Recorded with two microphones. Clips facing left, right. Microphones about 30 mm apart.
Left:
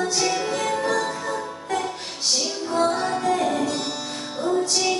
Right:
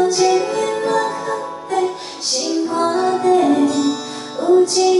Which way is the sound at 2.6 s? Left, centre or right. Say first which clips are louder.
Right 3 dB; centre.